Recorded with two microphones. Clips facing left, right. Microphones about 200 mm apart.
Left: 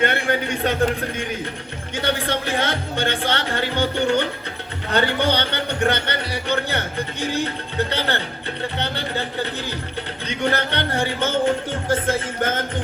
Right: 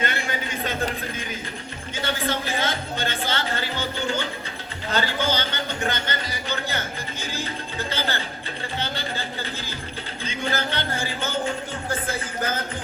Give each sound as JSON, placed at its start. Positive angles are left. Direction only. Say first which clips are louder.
{"t": 0.0, "sound": "a man's voice", "louder": "left 7 dB", "side_deg": 65}